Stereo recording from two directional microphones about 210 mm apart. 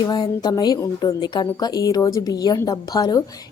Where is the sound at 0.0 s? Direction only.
20° left (ahead or behind).